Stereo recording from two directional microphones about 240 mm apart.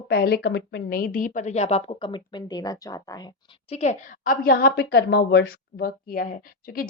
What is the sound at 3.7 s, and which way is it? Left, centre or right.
Speech, left.